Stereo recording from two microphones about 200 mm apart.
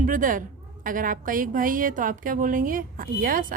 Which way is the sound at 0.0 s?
45° right (ahead or behind).